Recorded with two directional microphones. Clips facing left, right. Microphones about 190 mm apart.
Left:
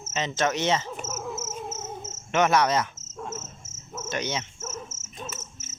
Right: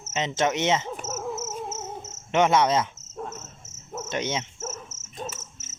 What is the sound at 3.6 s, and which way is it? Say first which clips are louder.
Cricket: right 3 dB; 35° right (ahead or behind).